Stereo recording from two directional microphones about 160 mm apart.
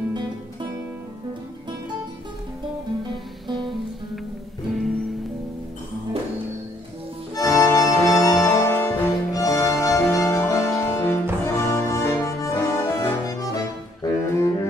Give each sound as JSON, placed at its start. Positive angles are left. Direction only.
{"t": 3.1, "sound": "music", "side_deg": -30}
{"t": 4.7, "sound": "music", "side_deg": 0}
{"t": 7.3, "sound": "music", "side_deg": 20}
{"t": 14.0, "sound": "saxophone", "side_deg": 15}